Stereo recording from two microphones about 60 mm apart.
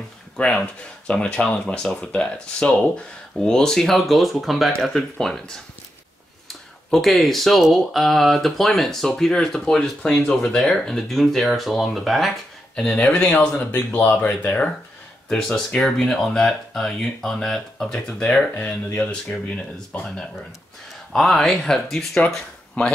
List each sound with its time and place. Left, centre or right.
0.4 s speech: centre
6.9 s speech: centre
12.8 s speech: centre
15.3 s speech: centre
19.9 s speech: left
21.1 s speech: centre
21.9 s speech: centre
22.8 s speech: left